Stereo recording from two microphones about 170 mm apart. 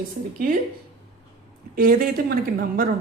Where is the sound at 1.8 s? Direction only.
60° right (ahead or behind).